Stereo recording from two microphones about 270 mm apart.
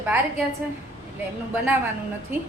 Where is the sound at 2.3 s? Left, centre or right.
Centre.